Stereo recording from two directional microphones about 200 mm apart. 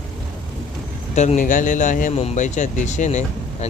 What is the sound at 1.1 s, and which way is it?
Speech, 35° left (ahead or behind).